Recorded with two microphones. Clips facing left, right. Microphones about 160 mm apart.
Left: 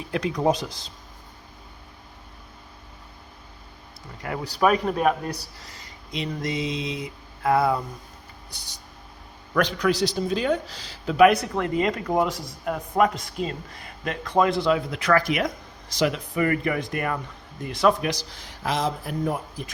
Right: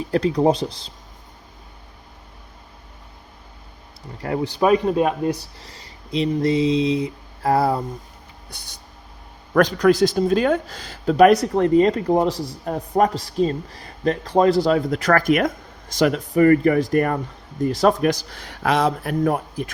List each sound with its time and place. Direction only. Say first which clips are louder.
0.1 s speech: right 5 dB; 35° right (ahead or behind)
4.2 s speech: right 3 dB; 30° right (ahead or behind)
5.5 s a sound: right 2 dB; 30° right (ahead or behind)
8.4 s speech: right 3 dB; 55° right (ahead or behind)
9.6 s speech: right 7 dB; 45° right (ahead or behind); by 19.7 s 60° right (ahead or behind)